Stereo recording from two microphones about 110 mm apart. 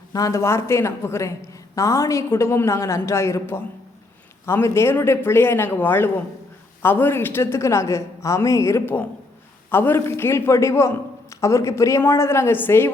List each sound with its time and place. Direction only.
0.1 s a woman's voice: 30° left (ahead or behind)